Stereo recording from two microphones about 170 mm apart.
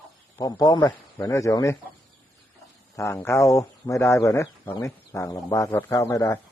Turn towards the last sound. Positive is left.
turn(degrees=20)  # may be behind; listen again after turning